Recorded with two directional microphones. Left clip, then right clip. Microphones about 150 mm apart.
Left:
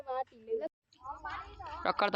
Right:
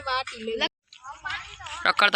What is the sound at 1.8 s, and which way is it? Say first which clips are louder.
Speech: right 11 dB; centre (ahead or behind).